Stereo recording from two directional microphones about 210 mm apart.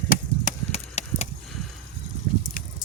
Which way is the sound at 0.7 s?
30° left (ahead or behind).